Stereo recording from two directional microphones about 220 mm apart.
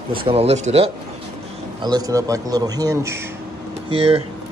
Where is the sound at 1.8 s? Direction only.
15° right (ahead or behind).